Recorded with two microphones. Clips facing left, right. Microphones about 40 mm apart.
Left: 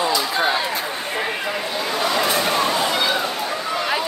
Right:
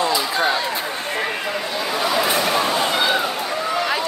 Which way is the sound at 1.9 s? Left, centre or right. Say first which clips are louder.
Right 1 dB; centre.